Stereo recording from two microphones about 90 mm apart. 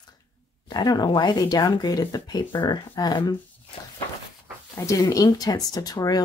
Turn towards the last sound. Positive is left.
turn(degrees=45)  # may be behind; listen again after turning